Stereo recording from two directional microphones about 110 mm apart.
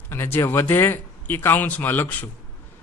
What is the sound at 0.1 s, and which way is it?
Speech, 20° left (ahead or behind).